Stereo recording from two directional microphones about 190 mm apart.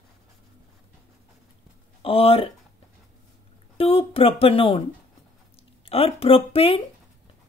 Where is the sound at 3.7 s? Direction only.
30° left (ahead or behind).